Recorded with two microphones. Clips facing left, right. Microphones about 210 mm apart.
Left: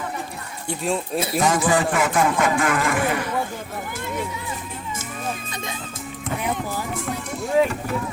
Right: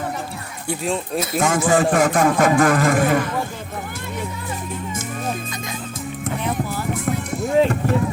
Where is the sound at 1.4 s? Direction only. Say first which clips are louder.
Right 2 dB; 50° right (ahead or behind).